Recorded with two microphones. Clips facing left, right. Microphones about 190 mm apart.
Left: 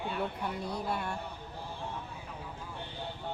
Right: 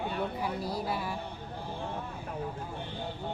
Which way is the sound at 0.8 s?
5° right (ahead or behind).